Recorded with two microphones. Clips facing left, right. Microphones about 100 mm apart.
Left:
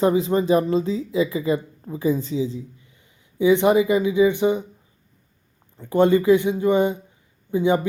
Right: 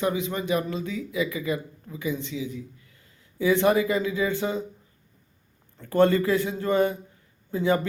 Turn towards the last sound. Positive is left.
turn(degrees=20)  # may be behind; listen again after turning